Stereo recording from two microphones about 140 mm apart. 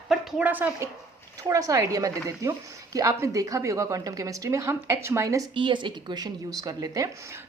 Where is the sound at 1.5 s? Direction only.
25° right (ahead or behind).